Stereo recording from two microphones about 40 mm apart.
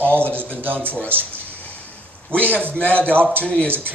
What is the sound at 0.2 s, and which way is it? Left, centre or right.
Speech, right.